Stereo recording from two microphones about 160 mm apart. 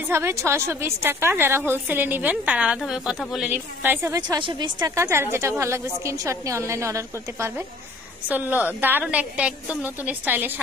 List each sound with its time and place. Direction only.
0.1 s a woman's voice: 15° right (ahead or behind)
4.4 s a woman's voice: 30° right (ahead or behind); by 10.5 s 10° right (ahead or behind)